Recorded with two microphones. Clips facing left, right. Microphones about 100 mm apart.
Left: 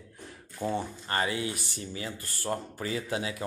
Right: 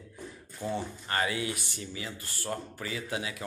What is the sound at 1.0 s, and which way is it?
Speech, 30° left (ahead or behind).